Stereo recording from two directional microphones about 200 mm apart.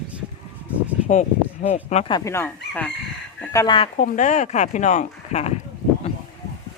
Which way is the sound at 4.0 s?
35° left (ahead or behind).